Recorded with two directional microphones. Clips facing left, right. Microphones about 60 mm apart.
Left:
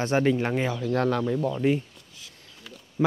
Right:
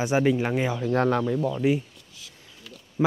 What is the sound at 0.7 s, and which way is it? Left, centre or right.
Speech, right.